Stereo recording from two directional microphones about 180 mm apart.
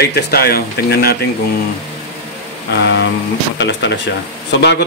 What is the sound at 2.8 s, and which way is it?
Speech, 75° left (ahead or behind).